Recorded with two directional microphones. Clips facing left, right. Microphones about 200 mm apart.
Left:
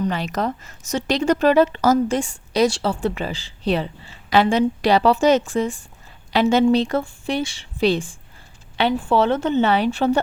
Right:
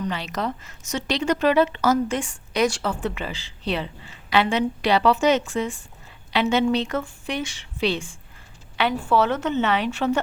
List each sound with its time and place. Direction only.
0.1 s a woman's voice: 45° left (ahead or behind)